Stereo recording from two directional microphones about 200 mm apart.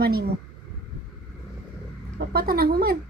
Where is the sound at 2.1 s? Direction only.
50° right (ahead or behind).